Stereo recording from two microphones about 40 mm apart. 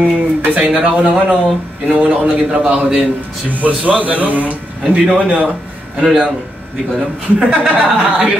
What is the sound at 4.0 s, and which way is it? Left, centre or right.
Speech, right.